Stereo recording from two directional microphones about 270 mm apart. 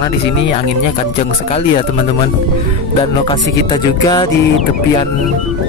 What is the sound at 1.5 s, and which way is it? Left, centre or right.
Speech, left.